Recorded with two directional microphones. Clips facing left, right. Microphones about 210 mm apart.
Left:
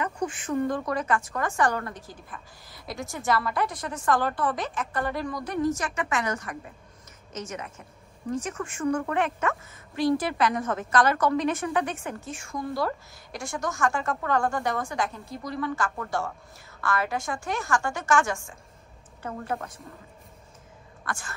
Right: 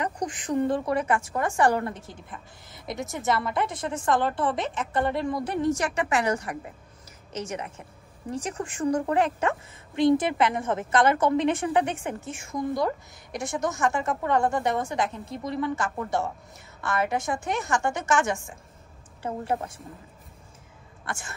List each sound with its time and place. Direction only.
0.5 s a woman's voice: 30° right (ahead or behind)
8.3 s a woman's voice: 30° right (ahead or behind)
13.4 s a woman's voice: centre (ahead or behind)
13.7 s a woman's voice: 20° right (ahead or behind)
21.0 s speech: 25° right (ahead or behind)